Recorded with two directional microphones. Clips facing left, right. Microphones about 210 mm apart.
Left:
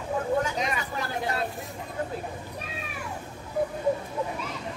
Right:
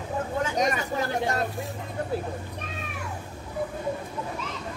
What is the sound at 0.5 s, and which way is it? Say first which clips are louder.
Speech: right 5 dB; 45° right (ahead or behind).